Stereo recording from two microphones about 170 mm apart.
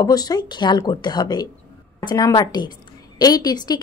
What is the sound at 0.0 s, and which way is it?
Speech, 25° left (ahead or behind).